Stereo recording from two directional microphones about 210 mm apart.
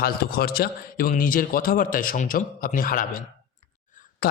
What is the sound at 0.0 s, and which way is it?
Speech, 45° left (ahead or behind).